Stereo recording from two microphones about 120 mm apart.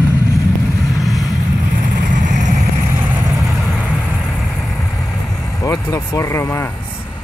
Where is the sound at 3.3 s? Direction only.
Centre (ahead or behind).